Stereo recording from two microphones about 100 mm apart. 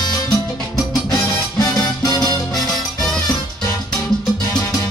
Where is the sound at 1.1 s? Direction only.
40° left (ahead or behind).